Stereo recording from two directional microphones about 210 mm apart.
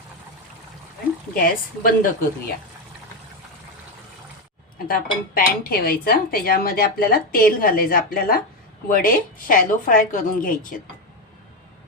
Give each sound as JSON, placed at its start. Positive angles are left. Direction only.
{"t": 1.3, "sound": "dishes", "side_deg": 45}
{"t": 4.9, "sound": "dishes", "side_deg": 45}
{"t": 8.9, "sound": "a woman's voice", "side_deg": 45}